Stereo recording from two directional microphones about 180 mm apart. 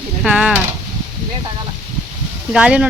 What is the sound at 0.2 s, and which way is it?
Speech, 5° right (ahead or behind).